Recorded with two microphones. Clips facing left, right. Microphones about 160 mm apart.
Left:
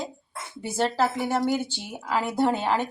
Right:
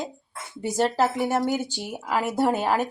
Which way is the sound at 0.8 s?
5° right (ahead or behind).